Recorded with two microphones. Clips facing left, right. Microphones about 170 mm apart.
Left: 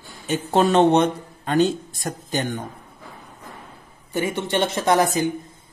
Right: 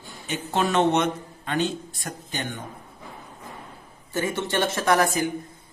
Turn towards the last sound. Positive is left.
turn(degrees=20)  # may be behind; listen again after turning